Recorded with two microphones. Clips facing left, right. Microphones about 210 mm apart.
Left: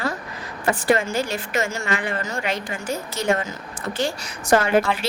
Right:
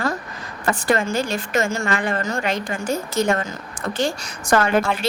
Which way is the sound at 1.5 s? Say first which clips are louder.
Right 5 dB; 50° right (ahead or behind).